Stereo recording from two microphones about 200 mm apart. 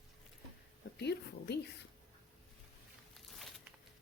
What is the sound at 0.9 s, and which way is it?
Speech, 55° left (ahead or behind).